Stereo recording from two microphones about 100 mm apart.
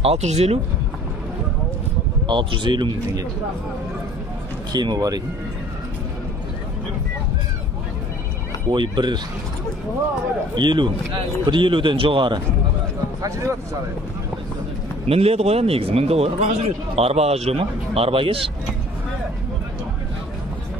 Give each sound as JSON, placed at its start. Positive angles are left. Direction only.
{"t": 0.0, "sound": "speech", "side_deg": -85}
{"t": 2.2, "sound": "speech", "side_deg": -50}
{"t": 4.7, "sound": "speech", "side_deg": -45}
{"t": 8.6, "sound": "speech", "side_deg": -50}
{"t": 10.5, "sound": "speech", "side_deg": -50}
{"t": 13.2, "sound": "speech", "side_deg": -30}
{"t": 15.0, "sound": "a man's voice", "side_deg": -90}